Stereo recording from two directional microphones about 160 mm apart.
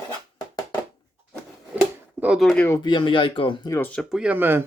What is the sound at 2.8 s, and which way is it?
Speech, 30° left (ahead or behind).